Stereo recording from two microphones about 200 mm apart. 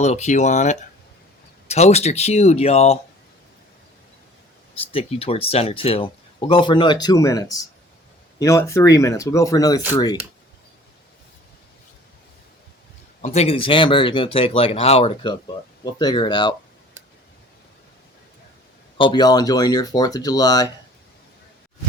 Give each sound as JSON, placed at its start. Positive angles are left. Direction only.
{"t": 0.0, "sound": "speech", "side_deg": 35}
{"t": 4.7, "sound": "speech", "side_deg": 30}
{"t": 13.2, "sound": "speech", "side_deg": 30}
{"t": 18.9, "sound": "speech", "side_deg": 25}